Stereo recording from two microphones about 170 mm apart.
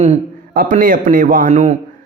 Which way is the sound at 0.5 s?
55° right (ahead or behind).